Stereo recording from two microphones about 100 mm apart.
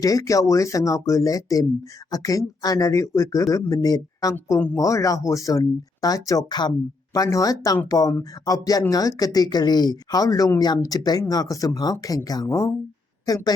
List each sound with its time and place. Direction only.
0.0 s a woman's voice: 35° left (ahead or behind)